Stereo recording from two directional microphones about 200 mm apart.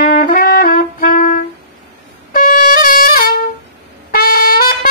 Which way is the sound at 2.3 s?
45° left (ahead or behind).